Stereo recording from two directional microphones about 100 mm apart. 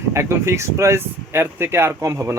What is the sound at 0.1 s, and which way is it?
Speech, 25° right (ahead or behind).